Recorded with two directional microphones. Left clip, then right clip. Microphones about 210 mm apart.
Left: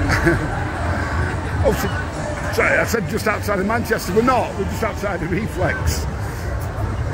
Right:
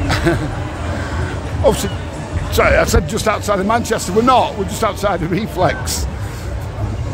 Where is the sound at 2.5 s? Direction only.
20° right (ahead or behind).